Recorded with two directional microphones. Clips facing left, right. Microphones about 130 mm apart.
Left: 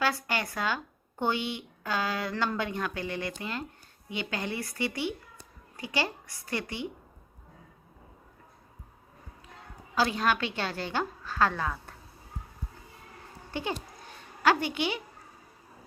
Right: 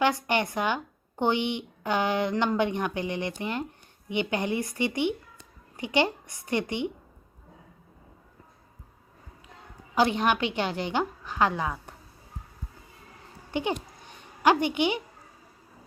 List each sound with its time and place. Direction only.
0.0 s speech: 20° right (ahead or behind)
9.9 s a woman's voice: 20° right (ahead or behind)
13.5 s speech: 20° right (ahead or behind)